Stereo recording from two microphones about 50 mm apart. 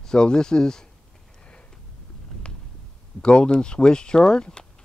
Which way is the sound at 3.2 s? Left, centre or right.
Centre.